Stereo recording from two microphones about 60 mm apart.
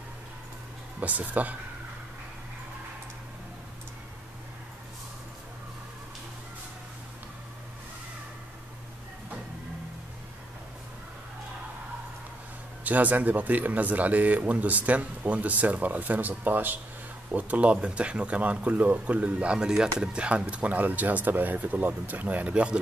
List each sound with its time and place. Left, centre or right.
0.9 s speech: right
12.8 s speech: right